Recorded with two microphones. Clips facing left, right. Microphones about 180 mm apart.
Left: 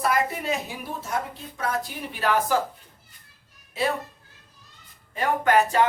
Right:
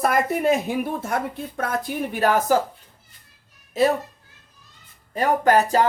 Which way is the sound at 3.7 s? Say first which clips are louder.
Right 7 dB; 40° right (ahead or behind).